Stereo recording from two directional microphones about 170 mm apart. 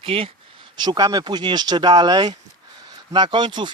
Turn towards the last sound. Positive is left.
turn(degrees=-25)  # may be behind; listen again after turning